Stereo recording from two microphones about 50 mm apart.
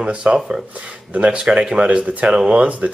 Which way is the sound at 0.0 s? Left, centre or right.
Centre.